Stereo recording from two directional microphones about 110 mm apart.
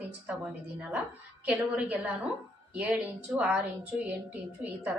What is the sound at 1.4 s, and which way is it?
A woman's voice, 10° right (ahead or behind).